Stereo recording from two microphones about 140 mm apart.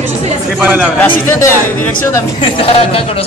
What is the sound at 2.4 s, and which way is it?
Speech, 40° left (ahead or behind).